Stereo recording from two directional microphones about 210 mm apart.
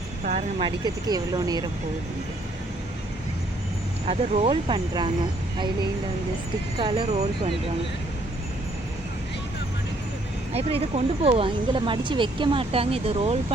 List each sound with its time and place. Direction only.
0.3 s a sound: 35° right (ahead or behind)
0.9 s speech: 20° right (ahead or behind)
4.0 s speech: 30° right (ahead or behind)
6.7 s speech: 25° right (ahead or behind)
10.5 s speech: 30° right (ahead or behind)